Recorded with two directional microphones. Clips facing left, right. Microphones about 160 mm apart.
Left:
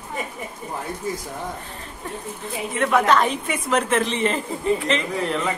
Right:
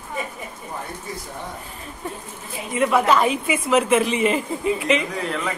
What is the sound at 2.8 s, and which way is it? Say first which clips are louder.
A woman's voice: right 1 dB; 5° right (ahead or behind).